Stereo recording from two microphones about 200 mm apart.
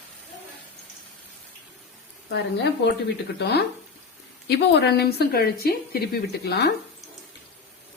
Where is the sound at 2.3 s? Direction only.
60° left (ahead or behind).